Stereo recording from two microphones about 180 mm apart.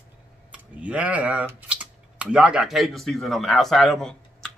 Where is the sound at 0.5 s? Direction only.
5° right (ahead or behind).